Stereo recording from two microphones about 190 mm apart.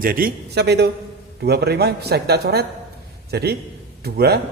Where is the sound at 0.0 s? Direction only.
50° right (ahead or behind).